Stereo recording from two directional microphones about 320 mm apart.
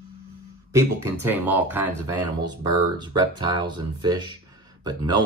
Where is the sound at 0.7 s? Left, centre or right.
Centre.